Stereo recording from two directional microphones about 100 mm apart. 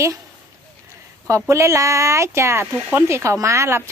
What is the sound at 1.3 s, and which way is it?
Speech, 30° right (ahead or behind).